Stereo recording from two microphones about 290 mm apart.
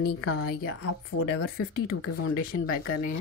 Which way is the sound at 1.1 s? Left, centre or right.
Left.